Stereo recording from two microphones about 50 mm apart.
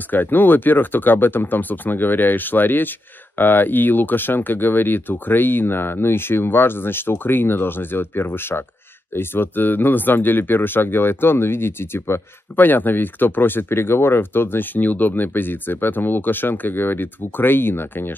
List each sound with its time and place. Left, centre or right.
0.1 s speech: left
12.5 s speech: left